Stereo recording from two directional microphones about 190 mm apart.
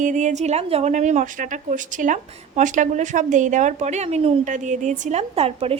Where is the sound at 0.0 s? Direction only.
40° right (ahead or behind).